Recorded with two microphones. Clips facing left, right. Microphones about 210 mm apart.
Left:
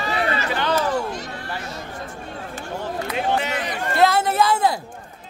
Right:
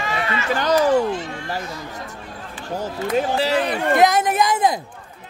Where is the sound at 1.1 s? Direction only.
40° left (ahead or behind).